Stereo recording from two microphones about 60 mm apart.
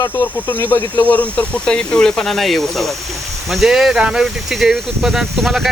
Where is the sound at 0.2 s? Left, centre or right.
Left.